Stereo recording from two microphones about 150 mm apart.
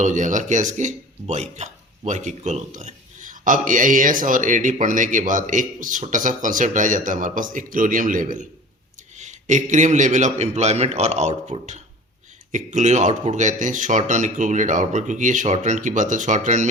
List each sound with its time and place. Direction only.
0.0 s a man's voice: 55° right (ahead or behind)